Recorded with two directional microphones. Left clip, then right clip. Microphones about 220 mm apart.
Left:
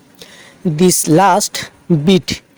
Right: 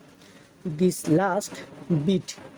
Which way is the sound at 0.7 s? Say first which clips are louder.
Left 12 dB; 45° left (ahead or behind).